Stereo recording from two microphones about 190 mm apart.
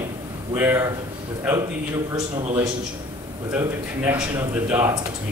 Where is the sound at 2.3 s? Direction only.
20° right (ahead or behind).